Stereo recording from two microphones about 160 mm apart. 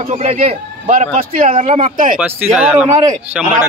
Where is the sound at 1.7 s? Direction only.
35° right (ahead or behind).